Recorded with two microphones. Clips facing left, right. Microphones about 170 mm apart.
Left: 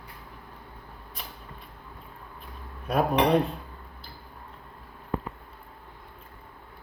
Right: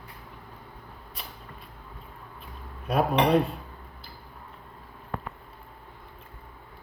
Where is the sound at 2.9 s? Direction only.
5° right (ahead or behind).